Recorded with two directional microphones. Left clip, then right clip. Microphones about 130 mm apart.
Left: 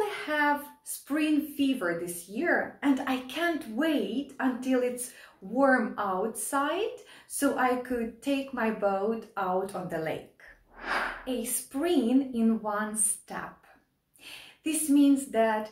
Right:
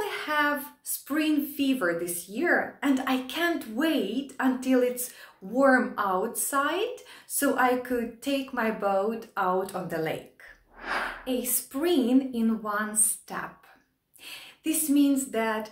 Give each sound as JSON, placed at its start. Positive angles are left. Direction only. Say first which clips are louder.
{"t": 0.0, "sound": "a sound", "louder": "right 1 dB", "side_deg": -20}
{"t": 1.0, "sound": "a woman's voice", "louder": "right 1 dB", "side_deg": -20}
{"t": 10.8, "sound": "gasp", "louder": "even", "side_deg": 0}
{"t": 11.2, "sound": "speech", "louder": "right 3 dB", "side_deg": -20}
{"t": 14.2, "sound": "speech", "louder": "right 2 dB", "side_deg": -20}